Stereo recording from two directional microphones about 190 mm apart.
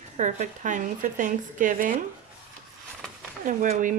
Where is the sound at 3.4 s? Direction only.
40° right (ahead or behind).